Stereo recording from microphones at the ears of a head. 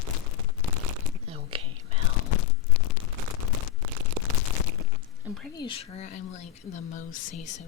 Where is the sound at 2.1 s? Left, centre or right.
Left.